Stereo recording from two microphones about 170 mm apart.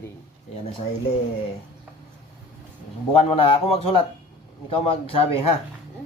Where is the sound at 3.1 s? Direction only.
35° left (ahead or behind).